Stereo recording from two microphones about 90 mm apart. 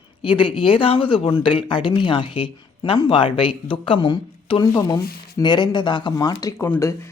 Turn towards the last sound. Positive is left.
turn(degrees=30)  # may be behind; listen again after turning